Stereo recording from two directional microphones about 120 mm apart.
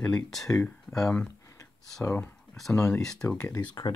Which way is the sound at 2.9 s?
5° left (ahead or behind).